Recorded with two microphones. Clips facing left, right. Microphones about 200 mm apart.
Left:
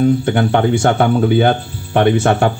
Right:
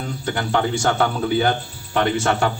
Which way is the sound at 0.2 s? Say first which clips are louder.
Left 7 dB; 55° left (ahead or behind).